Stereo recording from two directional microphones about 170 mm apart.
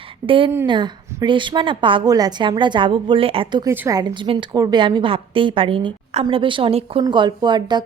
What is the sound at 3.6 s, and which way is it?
A woman's voice, 15° right (ahead or behind).